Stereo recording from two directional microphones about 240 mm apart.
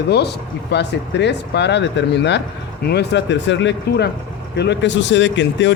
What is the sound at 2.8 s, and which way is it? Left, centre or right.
A man's voice, left.